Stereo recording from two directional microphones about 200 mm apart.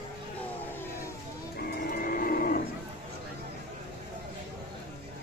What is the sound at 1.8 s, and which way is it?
Train, 45° left (ahead or behind).